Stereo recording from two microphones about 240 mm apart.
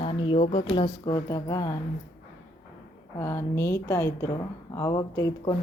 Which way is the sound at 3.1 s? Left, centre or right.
Centre.